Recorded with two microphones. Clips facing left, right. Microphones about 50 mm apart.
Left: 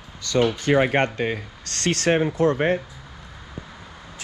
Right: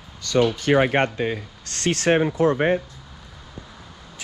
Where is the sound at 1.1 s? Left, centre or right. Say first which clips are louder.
Even; centre.